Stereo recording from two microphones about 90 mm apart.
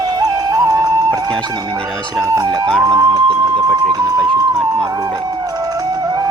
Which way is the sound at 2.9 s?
45° right (ahead or behind).